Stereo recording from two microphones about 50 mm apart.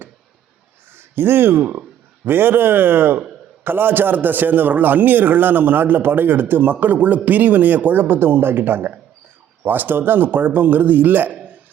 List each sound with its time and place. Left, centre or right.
0.9 s a man's voice: right